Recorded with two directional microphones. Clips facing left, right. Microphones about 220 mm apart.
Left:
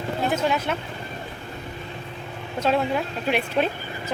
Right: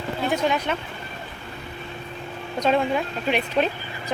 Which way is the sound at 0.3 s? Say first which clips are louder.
Right 1 dB; centre (ahead or behind).